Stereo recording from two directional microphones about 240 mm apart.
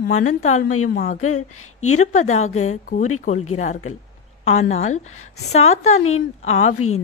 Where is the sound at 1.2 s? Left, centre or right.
Left.